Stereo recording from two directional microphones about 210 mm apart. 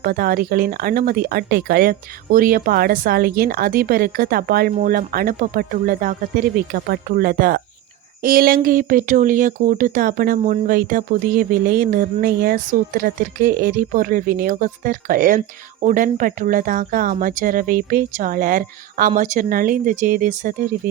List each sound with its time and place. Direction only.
0.0 s speech: 45° right (ahead or behind)